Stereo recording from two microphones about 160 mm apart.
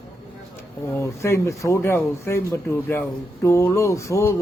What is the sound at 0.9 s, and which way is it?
Speech, 15° left (ahead or behind).